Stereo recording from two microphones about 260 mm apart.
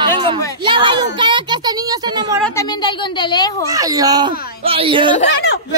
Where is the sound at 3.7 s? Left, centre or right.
Centre.